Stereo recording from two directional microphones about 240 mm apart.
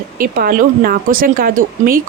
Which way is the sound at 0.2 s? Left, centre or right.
Right.